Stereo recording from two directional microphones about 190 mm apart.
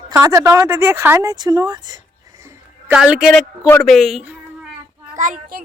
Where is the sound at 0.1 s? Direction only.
15° right (ahead or behind).